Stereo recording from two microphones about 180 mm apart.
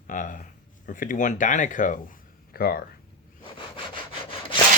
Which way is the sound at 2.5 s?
55° left (ahead or behind).